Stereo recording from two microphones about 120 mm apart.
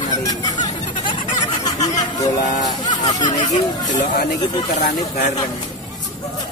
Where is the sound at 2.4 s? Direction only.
90° left.